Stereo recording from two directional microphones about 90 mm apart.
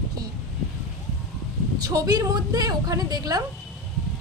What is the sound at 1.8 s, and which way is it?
A woman's voice, 45° right (ahead or behind).